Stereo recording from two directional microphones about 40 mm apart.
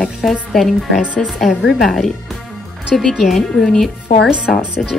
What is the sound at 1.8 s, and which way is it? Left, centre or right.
Speech, centre.